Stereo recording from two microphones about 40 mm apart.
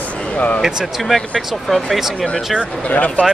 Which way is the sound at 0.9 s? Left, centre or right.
Centre.